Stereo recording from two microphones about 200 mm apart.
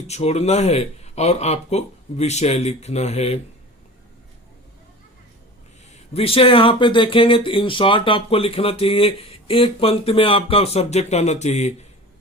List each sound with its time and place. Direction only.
0.1 s speech: 35° left (ahead or behind)
6.1 s speech: 30° left (ahead or behind)